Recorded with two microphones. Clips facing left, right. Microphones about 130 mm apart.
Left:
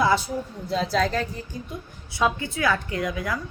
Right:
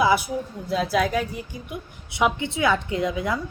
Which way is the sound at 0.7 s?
5° right (ahead or behind).